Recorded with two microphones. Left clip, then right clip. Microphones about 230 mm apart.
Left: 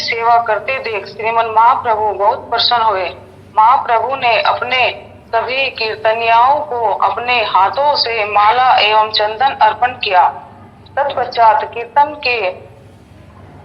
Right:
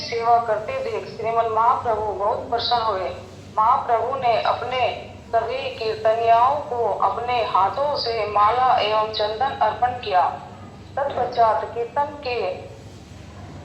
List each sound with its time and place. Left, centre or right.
0.1 s a woman's voice: left